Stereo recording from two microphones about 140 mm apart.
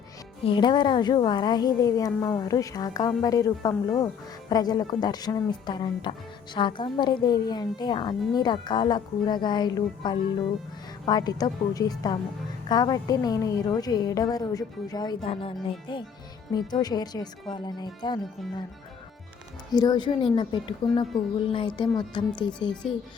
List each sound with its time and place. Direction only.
0.4 s a woman's voice: 35° left (ahead or behind)
15.2 s a woman's voice: 40° left (ahead or behind)
19.7 s speech: 30° left (ahead or behind)